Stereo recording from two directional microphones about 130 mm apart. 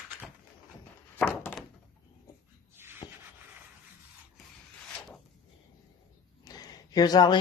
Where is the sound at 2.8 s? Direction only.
15° right (ahead or behind).